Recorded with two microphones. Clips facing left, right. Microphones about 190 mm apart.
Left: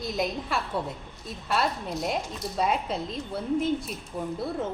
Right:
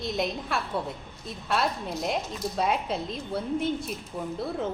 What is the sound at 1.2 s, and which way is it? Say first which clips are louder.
Speech: even; centre (ahead or behind).